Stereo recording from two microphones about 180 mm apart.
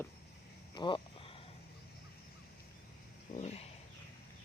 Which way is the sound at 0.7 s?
25° left (ahead or behind).